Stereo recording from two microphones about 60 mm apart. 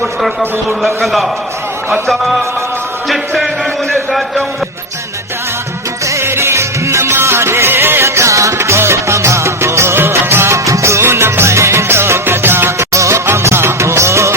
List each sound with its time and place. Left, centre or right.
0.2 s a man's voice: centre
3.1 s a man's voice: centre
6.1 s music: right
12.9 s music: right